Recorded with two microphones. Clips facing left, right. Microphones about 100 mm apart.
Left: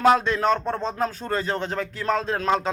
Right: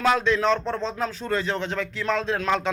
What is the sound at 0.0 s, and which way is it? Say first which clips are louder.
Speech: left 2 dB; 40° left (ahead or behind).